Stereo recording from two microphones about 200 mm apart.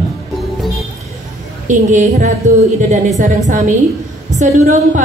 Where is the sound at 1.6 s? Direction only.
35° right (ahead or behind).